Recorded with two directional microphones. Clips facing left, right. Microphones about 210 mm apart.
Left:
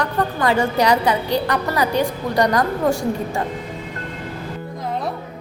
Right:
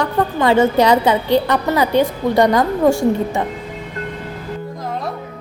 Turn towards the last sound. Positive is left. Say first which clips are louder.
# right 5 dB
turn(degrees=-25)  # may be behind; listen again after turning